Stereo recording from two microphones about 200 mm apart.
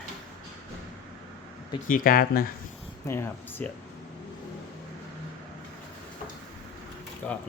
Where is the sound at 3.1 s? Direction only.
10° left (ahead or behind).